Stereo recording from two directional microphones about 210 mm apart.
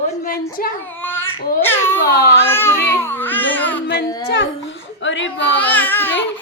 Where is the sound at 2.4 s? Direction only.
10° left (ahead or behind).